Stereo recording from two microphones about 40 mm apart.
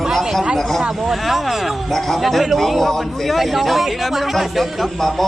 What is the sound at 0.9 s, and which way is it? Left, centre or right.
A man's voice, centre.